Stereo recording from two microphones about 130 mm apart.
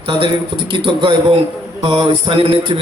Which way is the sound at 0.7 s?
40° right (ahead or behind).